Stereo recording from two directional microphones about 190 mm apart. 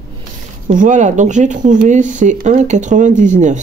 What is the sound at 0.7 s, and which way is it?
Speech, 40° right (ahead or behind).